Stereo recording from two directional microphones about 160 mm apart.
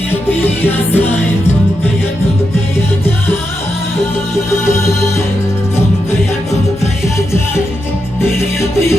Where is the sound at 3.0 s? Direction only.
15° left (ahead or behind).